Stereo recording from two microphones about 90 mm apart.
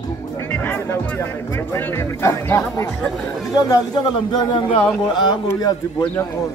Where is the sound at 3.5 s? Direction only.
50° left (ahead or behind).